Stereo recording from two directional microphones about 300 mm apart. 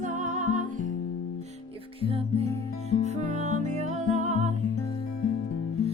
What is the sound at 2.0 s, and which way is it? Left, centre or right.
Music, centre.